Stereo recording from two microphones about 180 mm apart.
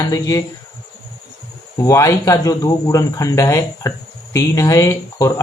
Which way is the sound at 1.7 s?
20° left (ahead or behind).